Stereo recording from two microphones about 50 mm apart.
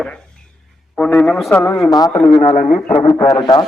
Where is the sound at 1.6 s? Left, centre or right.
Centre.